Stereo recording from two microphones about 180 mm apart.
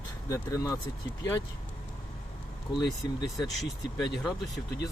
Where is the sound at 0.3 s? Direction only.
20° left (ahead or behind).